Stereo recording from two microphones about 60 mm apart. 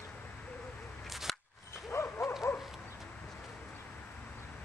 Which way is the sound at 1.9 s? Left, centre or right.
Left.